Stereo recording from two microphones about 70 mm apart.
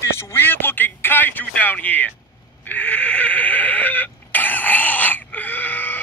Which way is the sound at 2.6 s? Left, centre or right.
Left.